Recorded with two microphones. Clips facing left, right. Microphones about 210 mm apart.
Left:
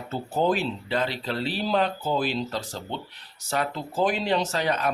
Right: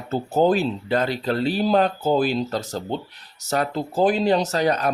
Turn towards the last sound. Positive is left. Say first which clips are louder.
# right 5 dB
turn(degrees=-40)  # may be behind; listen again after turning